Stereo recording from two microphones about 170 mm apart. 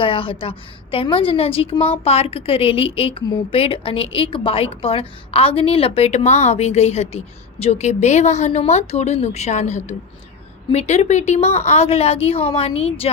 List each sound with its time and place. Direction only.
0.0 s a woman's voice: 30° left (ahead or behind)